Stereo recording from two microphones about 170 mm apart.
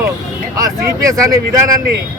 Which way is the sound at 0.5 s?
20° right (ahead or behind).